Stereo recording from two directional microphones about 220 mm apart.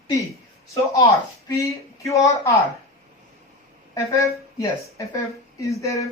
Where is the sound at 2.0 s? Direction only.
15° left (ahead or behind).